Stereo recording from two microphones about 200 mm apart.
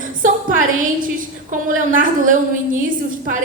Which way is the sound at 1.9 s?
45° right (ahead or behind).